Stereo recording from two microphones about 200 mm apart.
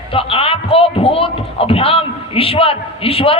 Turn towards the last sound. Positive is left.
turn(degrees=30)  # may be behind; listen again after turning